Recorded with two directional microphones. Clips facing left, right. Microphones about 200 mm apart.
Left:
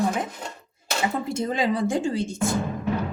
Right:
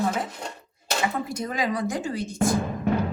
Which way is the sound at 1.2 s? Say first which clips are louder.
Left 3 dB; 25° left (ahead or behind).